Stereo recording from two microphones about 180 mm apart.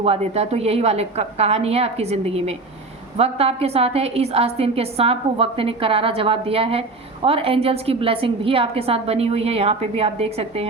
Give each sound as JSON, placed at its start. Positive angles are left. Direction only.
{"t": 0.0, "sound": "a woman's voice", "side_deg": -35}